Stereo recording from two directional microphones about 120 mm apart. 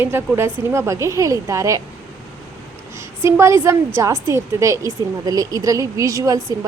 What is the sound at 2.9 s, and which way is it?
A woman's voice, 25° right (ahead or behind).